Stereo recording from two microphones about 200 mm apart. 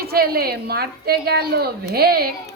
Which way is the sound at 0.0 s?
50° right (ahead or behind).